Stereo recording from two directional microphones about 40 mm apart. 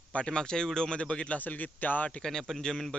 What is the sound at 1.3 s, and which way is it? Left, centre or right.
Speech, left.